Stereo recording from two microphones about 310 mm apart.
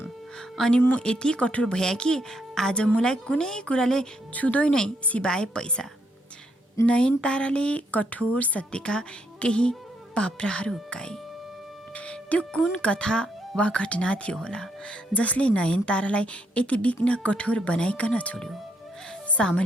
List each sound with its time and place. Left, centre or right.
0.0 s speech: centre